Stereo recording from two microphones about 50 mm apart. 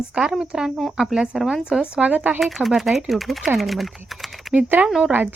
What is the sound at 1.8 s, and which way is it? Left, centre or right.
Speech, right.